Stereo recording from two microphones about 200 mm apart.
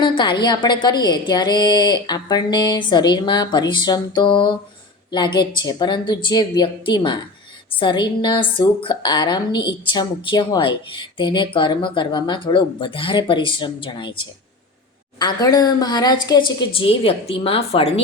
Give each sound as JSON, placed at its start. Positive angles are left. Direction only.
{"t": 0.0, "sound": "a woman's voice", "side_deg": 25}
{"t": 15.2, "sound": "a woman's voice", "side_deg": 20}